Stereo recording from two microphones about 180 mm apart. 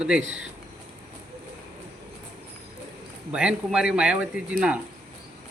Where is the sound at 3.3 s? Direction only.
5° right (ahead or behind).